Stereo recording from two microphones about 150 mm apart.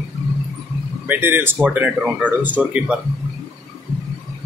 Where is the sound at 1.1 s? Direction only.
15° right (ahead or behind).